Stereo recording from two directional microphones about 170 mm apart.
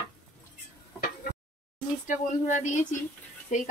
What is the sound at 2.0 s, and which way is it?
Speech, 45° left (ahead or behind).